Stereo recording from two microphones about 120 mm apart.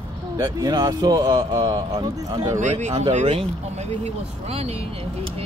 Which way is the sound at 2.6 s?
75° right (ahead or behind).